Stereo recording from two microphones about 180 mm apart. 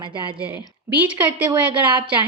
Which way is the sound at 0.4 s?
10° right (ahead or behind).